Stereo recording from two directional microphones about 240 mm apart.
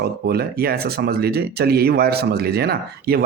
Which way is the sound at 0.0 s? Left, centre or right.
Right.